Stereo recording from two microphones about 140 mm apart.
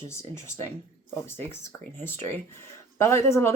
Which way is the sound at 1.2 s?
15° left (ahead or behind).